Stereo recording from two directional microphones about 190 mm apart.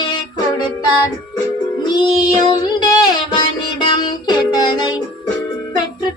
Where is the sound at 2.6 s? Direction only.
20° left (ahead or behind).